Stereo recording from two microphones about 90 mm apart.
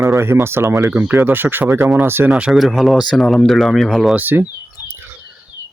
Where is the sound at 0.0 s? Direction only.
30° right (ahead or behind).